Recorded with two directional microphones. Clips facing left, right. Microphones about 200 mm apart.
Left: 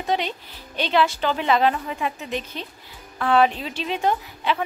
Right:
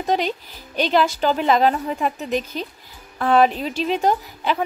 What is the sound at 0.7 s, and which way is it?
A woman's voice, 40° right (ahead or behind).